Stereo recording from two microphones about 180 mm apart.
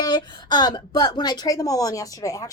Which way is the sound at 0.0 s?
20° left (ahead or behind).